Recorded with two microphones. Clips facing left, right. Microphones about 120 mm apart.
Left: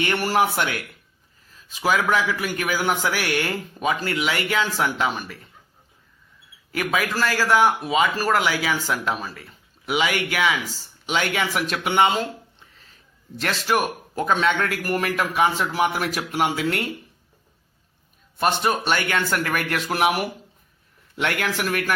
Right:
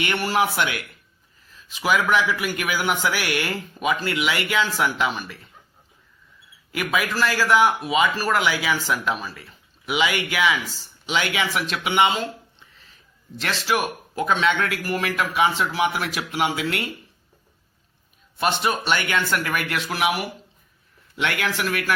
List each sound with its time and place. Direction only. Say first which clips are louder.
0.0 s speech: left 1 dB; 40° left (ahead or behind)
7.2 s a man's voice: even; 45° left (ahead or behind)
13.4 s a man's voice: left 1 dB; 45° left (ahead or behind)
18.3 s a man's voice: left 1 dB; 45° left (ahead or behind)